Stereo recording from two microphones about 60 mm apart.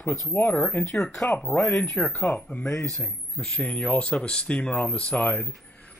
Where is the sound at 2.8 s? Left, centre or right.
Centre.